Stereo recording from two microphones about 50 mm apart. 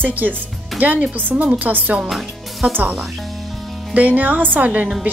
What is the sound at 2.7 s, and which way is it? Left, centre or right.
Speech, right.